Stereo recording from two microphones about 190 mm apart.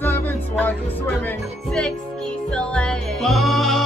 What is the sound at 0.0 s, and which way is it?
Music, 10° left (ahead or behind).